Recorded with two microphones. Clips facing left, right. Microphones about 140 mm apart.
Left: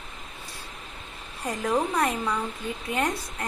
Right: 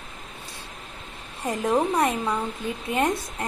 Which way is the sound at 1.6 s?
20° right (ahead or behind).